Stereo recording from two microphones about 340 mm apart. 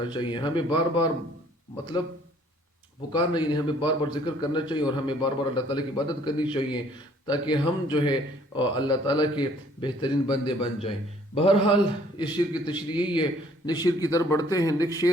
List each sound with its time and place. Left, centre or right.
0.0 s speech: centre
3.1 s speech: centre